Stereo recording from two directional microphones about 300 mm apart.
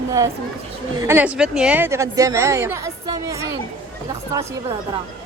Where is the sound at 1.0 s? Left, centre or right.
Centre.